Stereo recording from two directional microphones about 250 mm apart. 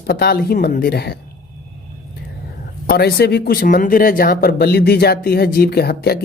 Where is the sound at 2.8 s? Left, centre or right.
Left.